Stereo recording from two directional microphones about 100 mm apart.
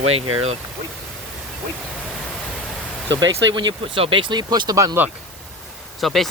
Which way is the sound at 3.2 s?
50° right (ahead or behind).